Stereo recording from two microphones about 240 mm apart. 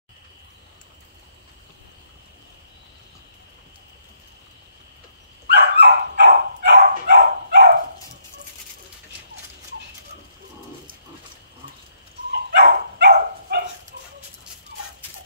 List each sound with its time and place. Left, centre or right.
5.5 s dog: right
12.5 s dog: right